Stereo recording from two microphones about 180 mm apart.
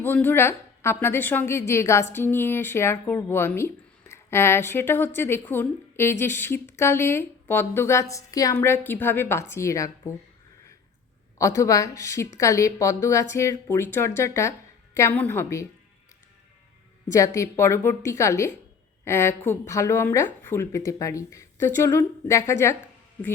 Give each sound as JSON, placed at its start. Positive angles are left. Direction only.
{"t": 0.0, "sound": "a woman's voice", "side_deg": 10}
{"t": 11.3, "sound": "a woman's voice", "side_deg": 15}
{"t": 17.1, "sound": "a woman's voice", "side_deg": 15}